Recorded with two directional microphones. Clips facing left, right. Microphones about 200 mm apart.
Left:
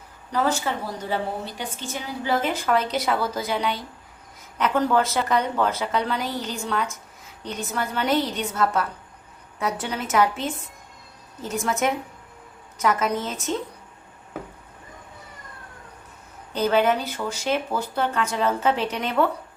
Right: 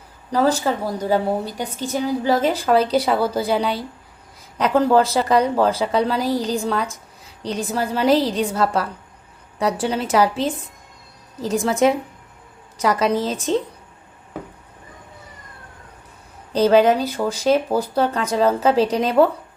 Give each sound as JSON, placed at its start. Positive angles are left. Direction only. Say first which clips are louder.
{"t": 0.3, "sound": "a woman's voice", "louder": "right 6 dB", "side_deg": -35}
{"t": 16.6, "sound": "a woman's voice", "louder": "right 6 dB", "side_deg": -35}